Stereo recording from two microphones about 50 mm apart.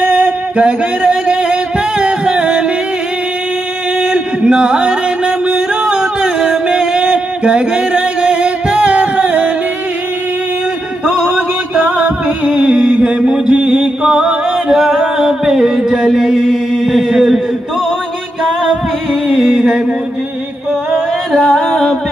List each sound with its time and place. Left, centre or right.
0.0 s music: right; by 2.6 s centre
4.0 s music: centre
12.0 s music: centre
19.2 s music: centre
21.4 s singing: centre